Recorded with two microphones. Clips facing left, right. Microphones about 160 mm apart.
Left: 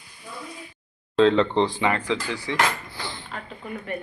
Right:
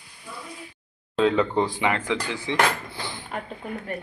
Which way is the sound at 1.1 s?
10° right (ahead or behind).